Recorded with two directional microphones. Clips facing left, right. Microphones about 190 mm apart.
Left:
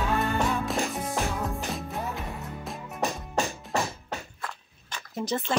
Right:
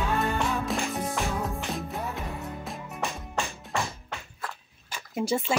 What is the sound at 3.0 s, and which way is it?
Music, 40° left (ahead or behind).